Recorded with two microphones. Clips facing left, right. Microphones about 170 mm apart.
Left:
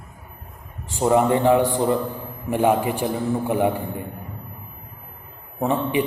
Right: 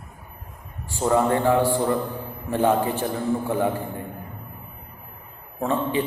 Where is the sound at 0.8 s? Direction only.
20° left (ahead or behind).